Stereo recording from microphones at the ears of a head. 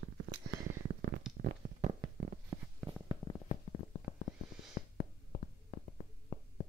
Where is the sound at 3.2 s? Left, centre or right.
Left.